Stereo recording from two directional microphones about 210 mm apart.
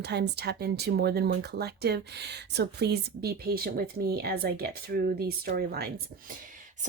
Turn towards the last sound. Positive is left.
turn(degrees=-45)  # may be behind; listen again after turning